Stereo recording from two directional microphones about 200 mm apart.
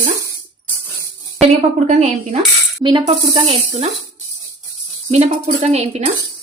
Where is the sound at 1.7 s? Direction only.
35° right (ahead or behind).